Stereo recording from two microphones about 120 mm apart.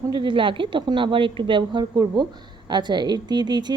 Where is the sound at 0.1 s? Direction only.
40° right (ahead or behind).